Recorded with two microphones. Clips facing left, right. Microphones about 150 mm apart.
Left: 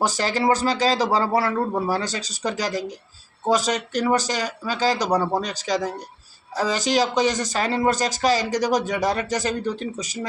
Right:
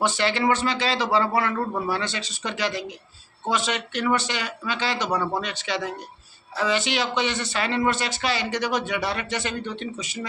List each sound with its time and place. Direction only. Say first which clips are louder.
0.0 s speech: left 1 dB; 40° left (ahead or behind)